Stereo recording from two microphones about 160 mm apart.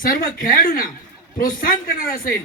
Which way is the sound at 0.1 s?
65° left (ahead or behind).